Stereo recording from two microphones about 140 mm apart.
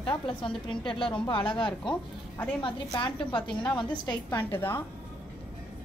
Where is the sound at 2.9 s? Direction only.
35° left (ahead or behind).